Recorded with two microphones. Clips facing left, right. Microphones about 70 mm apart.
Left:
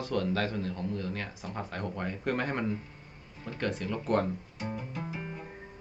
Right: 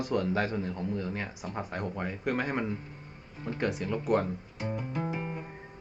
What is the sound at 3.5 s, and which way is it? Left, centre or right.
Speech, centre.